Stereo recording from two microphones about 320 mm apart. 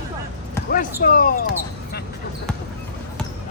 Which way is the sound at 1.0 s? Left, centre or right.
Left.